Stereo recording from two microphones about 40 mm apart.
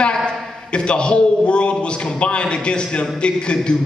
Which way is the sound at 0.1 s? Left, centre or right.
Centre.